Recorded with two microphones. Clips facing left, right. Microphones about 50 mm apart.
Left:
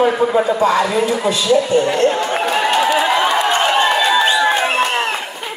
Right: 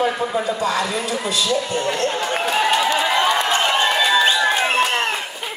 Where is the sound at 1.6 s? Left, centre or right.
Centre.